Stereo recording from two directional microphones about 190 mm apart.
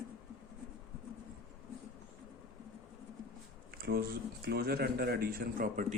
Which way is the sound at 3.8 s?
55° right (ahead or behind).